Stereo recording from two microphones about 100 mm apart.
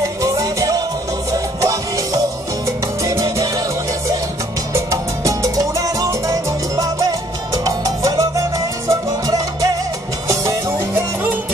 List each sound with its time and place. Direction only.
0.0 s music: 35° right (ahead or behind)
3.0 s salsa music: 30° right (ahead or behind)
4.7 s salsa music: 35° right (ahead or behind)
6.8 s music: 35° right (ahead or behind)